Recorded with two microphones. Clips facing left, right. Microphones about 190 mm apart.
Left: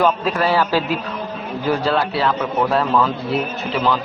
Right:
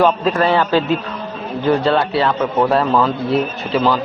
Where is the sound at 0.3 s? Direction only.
5° left (ahead or behind).